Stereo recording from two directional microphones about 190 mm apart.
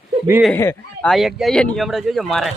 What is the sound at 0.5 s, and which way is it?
Speech, 10° left (ahead or behind).